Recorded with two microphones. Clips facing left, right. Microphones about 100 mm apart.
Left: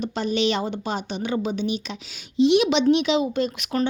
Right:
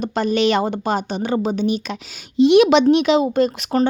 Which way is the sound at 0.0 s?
50° right (ahead or behind).